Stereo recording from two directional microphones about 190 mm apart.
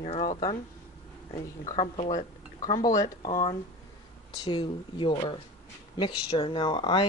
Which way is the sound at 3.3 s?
40° left (ahead or behind).